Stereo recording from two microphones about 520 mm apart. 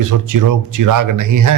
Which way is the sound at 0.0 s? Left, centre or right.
Right.